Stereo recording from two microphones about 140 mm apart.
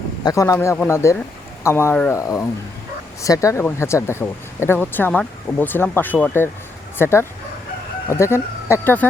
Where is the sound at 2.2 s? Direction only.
25° left (ahead or behind).